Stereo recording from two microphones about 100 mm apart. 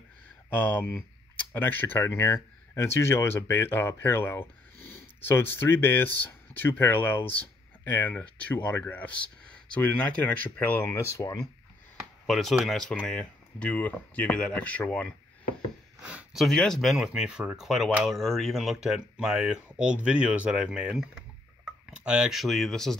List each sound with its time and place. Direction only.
0.5 s speech: 15° left (ahead or behind)
10.8 s speech: 30° left (ahead or behind)
12.3 s speech: centre (ahead or behind)
16.0 s a sound: 10° right (ahead or behind)
16.4 s speech: 5° left (ahead or behind)